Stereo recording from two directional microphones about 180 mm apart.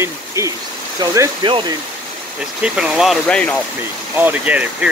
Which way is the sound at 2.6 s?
5° right (ahead or behind).